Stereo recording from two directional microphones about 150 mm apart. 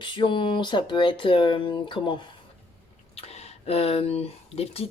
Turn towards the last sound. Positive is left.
turn(degrees=40)  # may be behind; listen again after turning